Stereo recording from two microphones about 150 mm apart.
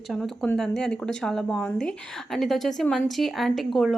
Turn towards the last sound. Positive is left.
turn(degrees=0)  # may be behind; listen again after turning